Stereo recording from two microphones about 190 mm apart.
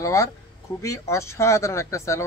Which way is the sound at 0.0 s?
15° left (ahead or behind).